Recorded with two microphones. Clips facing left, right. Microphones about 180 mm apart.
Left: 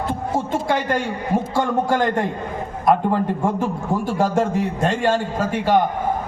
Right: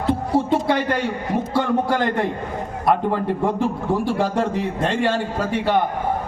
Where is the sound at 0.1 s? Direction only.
45° left (ahead or behind).